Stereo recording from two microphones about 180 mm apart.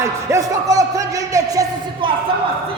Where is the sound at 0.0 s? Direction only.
15° right (ahead or behind).